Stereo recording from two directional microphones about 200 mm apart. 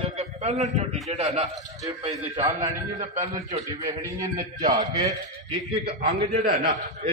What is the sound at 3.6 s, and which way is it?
Speech, 15° right (ahead or behind).